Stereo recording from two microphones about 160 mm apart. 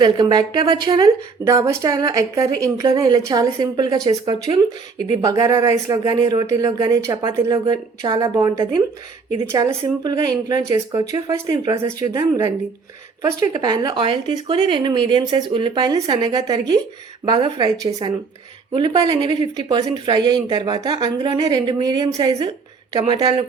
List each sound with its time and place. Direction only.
0.0 s speech: 25° right (ahead or behind)
13.5 s a woman's voice: 25° right (ahead or behind)